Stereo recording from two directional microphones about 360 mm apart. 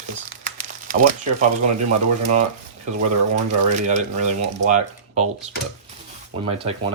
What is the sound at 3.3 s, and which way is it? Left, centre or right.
Speech, centre.